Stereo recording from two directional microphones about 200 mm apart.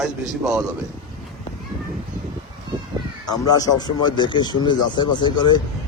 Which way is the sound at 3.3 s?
20° left (ahead or behind).